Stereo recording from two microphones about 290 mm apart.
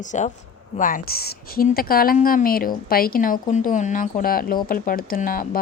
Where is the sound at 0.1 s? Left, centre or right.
Left.